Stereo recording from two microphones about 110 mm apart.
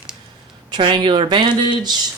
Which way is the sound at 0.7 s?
50° right (ahead or behind).